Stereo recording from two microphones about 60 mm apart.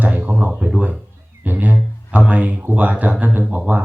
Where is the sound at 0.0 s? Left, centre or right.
Right.